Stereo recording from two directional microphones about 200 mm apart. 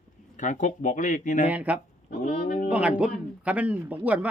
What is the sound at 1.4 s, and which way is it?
Speech, 5° right (ahead or behind).